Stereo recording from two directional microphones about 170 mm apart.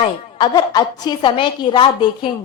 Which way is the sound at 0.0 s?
25° left (ahead or behind).